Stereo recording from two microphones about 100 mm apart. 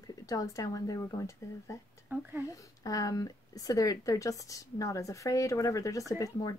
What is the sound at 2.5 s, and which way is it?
A woman's voice, 35° left (ahead or behind).